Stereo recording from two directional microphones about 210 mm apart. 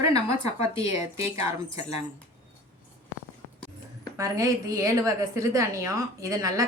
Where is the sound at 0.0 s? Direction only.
15° right (ahead or behind).